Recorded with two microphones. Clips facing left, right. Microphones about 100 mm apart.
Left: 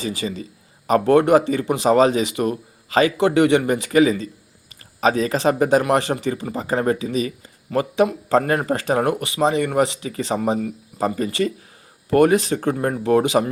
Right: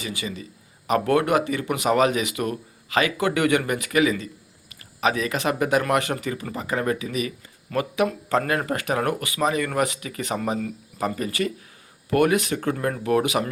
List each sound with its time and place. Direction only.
0.0 s a man's voice: 35° left (ahead or behind)